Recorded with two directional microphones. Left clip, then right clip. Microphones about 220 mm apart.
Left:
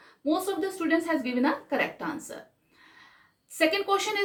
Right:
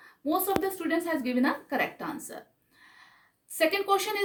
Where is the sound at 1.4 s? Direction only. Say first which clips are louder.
Left 1 dB; 35° right (ahead or behind).